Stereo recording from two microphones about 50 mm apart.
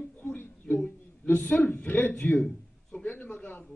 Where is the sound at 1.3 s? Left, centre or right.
Left.